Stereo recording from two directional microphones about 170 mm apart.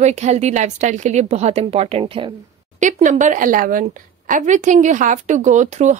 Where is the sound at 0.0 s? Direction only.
40° right (ahead or behind).